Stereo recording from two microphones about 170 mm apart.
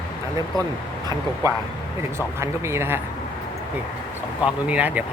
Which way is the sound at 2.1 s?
15° right (ahead or behind).